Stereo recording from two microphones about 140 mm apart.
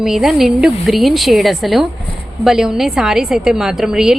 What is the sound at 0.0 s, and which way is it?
A woman's voice, 5° right (ahead or behind).